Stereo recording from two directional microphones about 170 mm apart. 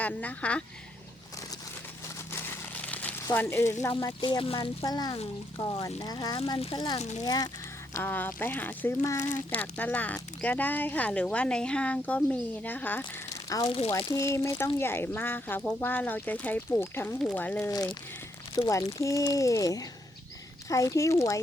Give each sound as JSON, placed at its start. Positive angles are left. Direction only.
{"t": 0.0, "sound": "speech", "side_deg": 10}
{"t": 2.3, "sound": "crumpling", "side_deg": 10}
{"t": 3.2, "sound": "speech", "side_deg": 15}
{"t": 4.3, "sound": "speech", "side_deg": 30}
{"t": 6.6, "sound": "speech", "side_deg": 35}
{"t": 7.3, "sound": "speech", "side_deg": 20}
{"t": 7.9, "sound": "speech", "side_deg": 10}
{"t": 18.5, "sound": "speech", "side_deg": 20}